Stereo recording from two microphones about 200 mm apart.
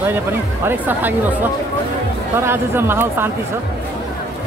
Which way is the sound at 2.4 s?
10° right (ahead or behind).